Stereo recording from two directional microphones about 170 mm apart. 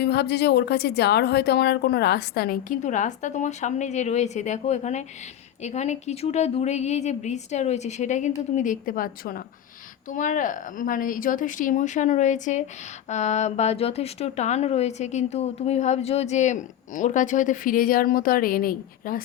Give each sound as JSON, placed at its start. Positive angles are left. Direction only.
{"t": 0.0, "sound": "a woman's voice", "side_deg": 75}